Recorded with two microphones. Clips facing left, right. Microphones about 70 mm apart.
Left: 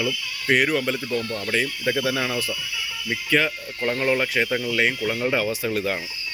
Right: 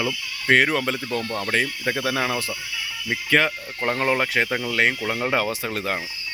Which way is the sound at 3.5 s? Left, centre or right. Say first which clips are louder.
Even; right.